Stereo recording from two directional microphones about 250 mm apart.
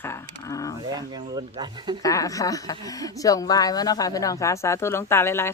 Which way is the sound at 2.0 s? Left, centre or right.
Centre.